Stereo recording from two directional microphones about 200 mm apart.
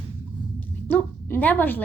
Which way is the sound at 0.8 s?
10° left (ahead or behind).